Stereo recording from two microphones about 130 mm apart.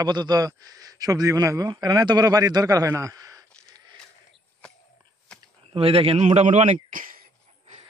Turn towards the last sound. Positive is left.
turn(degrees=-90)